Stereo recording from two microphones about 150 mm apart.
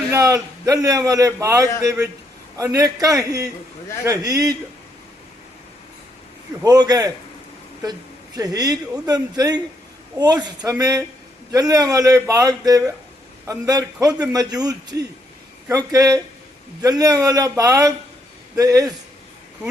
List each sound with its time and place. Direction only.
0.1 s a man's voice: 20° right (ahead or behind)
6.6 s a man's voice: 25° right (ahead or behind)
8.4 s a man's voice: 25° right (ahead or behind)